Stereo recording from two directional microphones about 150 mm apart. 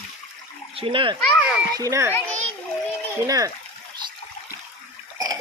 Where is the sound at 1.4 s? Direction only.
5° right (ahead or behind).